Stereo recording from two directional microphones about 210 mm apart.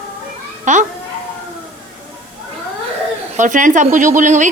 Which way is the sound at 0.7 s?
35° right (ahead or behind).